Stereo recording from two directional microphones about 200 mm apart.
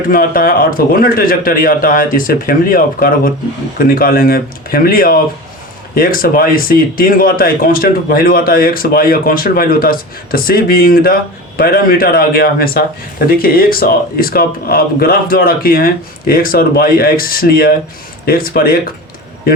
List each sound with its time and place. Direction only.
0.1 s a man's voice: 45° left (ahead or behind)